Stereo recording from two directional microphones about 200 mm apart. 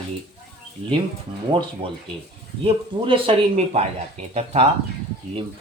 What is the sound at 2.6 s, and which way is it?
Speech, 25° right (ahead or behind).